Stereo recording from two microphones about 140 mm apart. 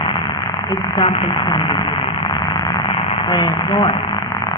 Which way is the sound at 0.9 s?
40° left (ahead or behind).